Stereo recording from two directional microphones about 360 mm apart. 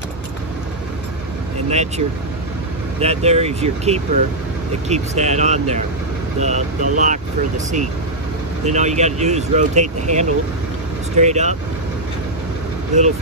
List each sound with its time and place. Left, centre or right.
1.7 s speech: centre
12.9 s speech: centre